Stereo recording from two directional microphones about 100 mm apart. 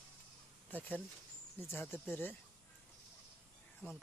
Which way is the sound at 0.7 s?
15° left (ahead or behind).